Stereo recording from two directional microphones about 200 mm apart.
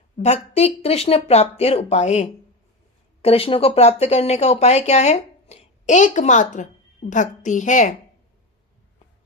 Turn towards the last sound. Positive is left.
turn(degrees=40)  # may be behind; listen again after turning